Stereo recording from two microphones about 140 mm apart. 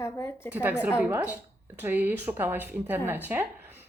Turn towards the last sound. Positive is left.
turn(degrees=-15)  # may be behind; listen again after turning